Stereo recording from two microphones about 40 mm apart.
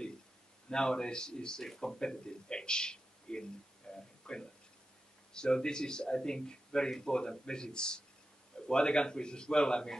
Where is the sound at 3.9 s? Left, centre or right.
Centre.